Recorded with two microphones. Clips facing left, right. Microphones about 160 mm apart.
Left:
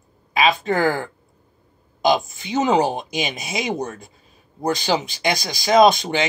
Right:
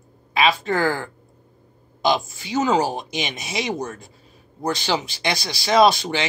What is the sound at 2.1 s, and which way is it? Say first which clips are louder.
Speech: left 2 dB; 20° left (ahead or behind).